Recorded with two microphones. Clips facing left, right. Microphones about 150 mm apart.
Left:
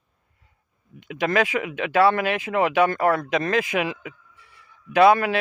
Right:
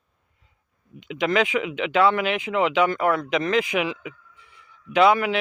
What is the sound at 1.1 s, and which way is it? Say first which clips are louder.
Speech: even; 50° left (ahead or behind).